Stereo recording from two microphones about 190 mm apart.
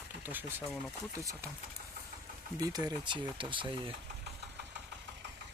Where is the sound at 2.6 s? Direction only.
20° right (ahead or behind).